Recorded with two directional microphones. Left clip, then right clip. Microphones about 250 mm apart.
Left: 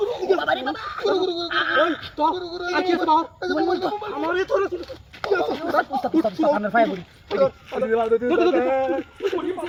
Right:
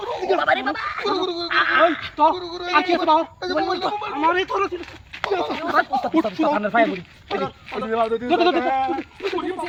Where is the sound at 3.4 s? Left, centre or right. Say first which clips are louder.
Even; right.